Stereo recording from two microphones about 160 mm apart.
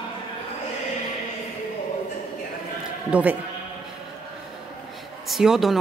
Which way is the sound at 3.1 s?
10° right (ahead or behind).